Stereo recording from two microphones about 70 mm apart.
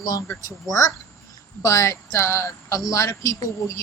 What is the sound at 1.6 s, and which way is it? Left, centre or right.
Speech, left.